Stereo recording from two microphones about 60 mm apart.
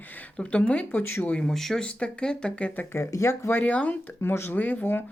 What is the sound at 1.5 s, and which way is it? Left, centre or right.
Speech, centre.